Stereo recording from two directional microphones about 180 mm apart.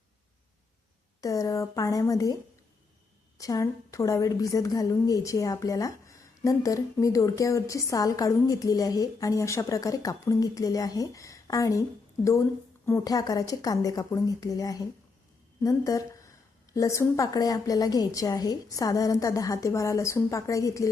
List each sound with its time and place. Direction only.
1.2 s a woman's voice: 20° left (ahead or behind)